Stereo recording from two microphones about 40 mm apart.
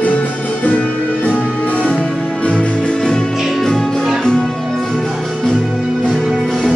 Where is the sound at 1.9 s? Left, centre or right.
Left.